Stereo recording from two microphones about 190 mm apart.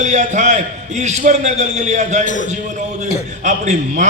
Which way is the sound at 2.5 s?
40° right (ahead or behind).